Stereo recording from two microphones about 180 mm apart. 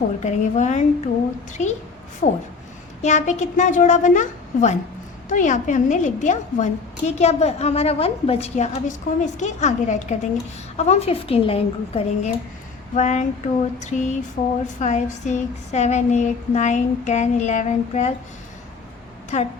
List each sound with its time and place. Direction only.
0.2 s a woman's voice: 40° left (ahead or behind)
2.2 s a woman's voice: 45° left (ahead or behind)
19.3 s a woman's voice: 40° left (ahead or behind)